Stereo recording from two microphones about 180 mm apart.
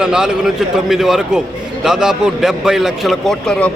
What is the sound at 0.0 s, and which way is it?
A man's voice, 5° right (ahead or behind).